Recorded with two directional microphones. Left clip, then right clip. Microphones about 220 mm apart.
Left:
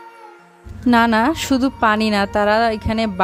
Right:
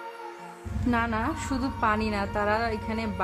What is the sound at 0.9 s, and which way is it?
Speech, 45° left (ahead or behind).